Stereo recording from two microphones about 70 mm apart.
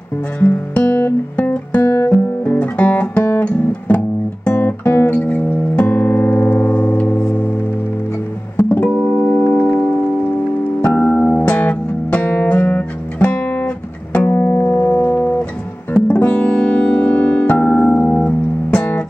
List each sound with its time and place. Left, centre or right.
0.4 s music: left
1.9 s music: left
2.4 s music: left
4.5 s guitar: left
7.2 s music: centre
8.5 s music: left
8.9 s organ: centre
10.8 s music: left